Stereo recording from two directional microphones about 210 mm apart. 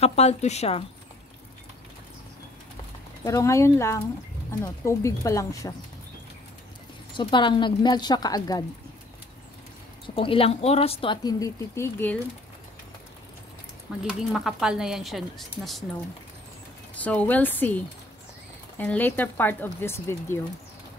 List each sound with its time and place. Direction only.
0.0 s a woman's voice: 30° left (ahead or behind)
3.3 s speech: 15° left (ahead or behind)
7.2 s a woman's voice: 20° left (ahead or behind)
10.0 s a woman's voice: 25° left (ahead or behind)
14.0 s a woman's voice: centre (ahead or behind)
16.9 s speech: 5° left (ahead or behind)